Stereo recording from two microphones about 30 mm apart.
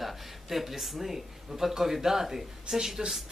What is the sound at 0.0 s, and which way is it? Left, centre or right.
Speech, centre.